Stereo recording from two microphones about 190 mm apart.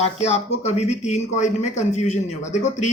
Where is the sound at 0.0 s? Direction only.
35° left (ahead or behind).